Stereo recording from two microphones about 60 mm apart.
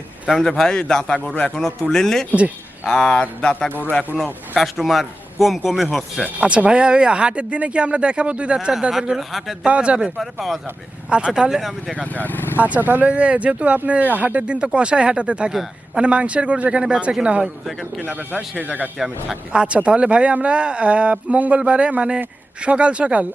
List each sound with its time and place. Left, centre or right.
0.3 s speech: centre
4.5 s speech: centre
6.4 s speech: centre
8.9 s speech: centre
9.6 s speech: centre
11.3 s speech: centre
12.0 s speech: left
12.5 s speech: right
17.7 s speech: centre
18.0 s speech: right